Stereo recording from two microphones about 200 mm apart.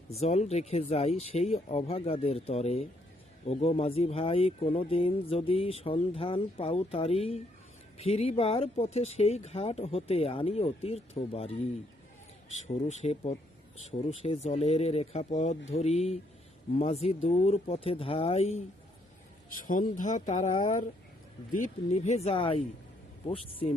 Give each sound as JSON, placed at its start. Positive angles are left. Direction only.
{"t": 0.1, "sound": "speech", "side_deg": 30}
{"t": 12.6, "sound": "speech", "side_deg": 35}
{"t": 20.0, "sound": "speech", "side_deg": 40}